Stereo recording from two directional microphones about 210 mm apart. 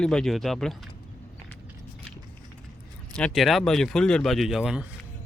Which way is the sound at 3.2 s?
Centre (ahead or behind).